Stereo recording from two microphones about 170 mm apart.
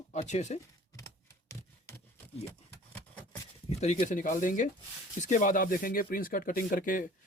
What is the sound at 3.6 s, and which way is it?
Speech, 40° left (ahead or behind).